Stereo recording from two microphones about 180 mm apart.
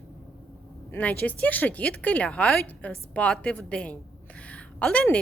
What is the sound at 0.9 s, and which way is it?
A woman's voice, 10° left (ahead or behind).